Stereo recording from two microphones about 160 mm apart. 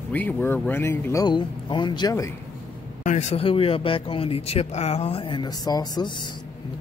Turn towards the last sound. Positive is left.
turn(degrees=25)  # may be behind; listen again after turning